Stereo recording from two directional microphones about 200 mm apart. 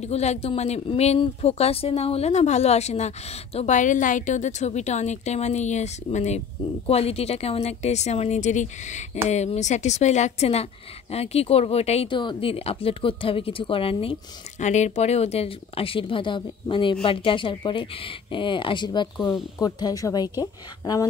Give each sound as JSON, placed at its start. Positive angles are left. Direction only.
{"t": 0.0, "sound": "speech", "side_deg": 35}